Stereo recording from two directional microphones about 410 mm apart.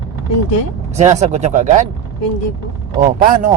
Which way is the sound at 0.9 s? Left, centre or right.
Centre.